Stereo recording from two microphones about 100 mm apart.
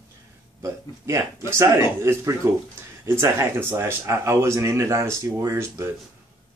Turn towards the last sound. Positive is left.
turn(degrees=-25)  # may be behind; listen again after turning